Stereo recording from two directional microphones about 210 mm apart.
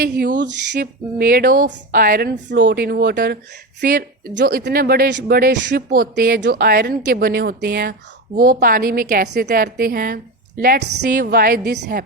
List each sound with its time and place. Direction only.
0.0 s speech: 45° right (ahead or behind)
11.2 s speech: 45° right (ahead or behind)